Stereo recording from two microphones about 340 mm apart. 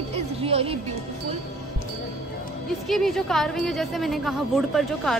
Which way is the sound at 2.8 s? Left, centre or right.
Centre.